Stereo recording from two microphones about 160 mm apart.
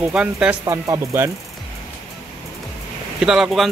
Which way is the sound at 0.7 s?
20° right (ahead or behind).